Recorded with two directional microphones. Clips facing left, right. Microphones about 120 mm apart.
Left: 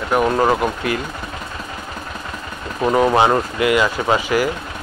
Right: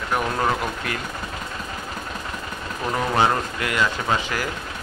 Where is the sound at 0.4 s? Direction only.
35° left (ahead or behind).